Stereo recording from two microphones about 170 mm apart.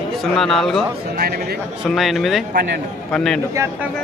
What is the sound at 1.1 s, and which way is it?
Speech, 65° right (ahead or behind).